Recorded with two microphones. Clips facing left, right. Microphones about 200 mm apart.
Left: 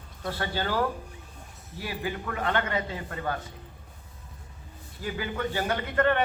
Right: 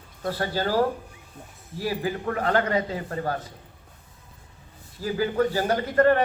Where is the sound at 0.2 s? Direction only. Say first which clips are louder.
Right 4 dB; 40° right (ahead or behind).